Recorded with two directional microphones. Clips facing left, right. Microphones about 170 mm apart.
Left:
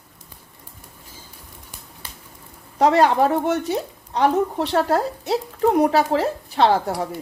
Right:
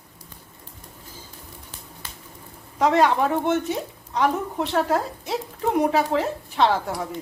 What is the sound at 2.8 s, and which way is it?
Speech, 35° left (ahead or behind).